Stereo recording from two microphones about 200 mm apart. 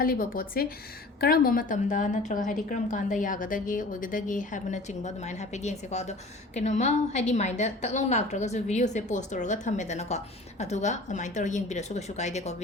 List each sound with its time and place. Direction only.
0.0 s a woman's voice: 45° left (ahead or behind)